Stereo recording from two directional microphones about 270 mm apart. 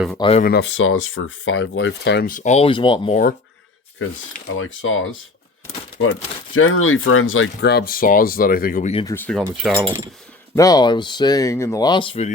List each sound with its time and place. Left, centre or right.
0.2 s speech: left
0.4 s speech: left; by 3.2 s centre
4.5 s speech: left
9.1 s speech: centre; by 12.3 s left